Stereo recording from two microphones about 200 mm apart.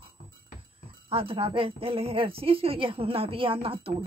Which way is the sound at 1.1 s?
25° right (ahead or behind).